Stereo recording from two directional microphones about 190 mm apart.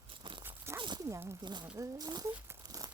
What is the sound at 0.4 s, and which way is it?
Zipper, 15° right (ahead or behind).